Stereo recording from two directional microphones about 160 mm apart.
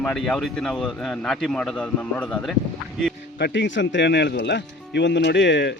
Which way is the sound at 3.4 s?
90° left.